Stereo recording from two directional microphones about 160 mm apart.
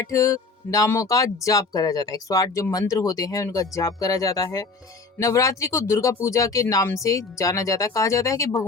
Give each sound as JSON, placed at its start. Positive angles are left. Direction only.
{"t": 0.1, "sound": "speech", "side_deg": 20}